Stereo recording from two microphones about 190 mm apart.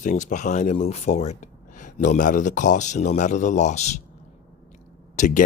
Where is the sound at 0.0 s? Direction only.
40° left (ahead or behind).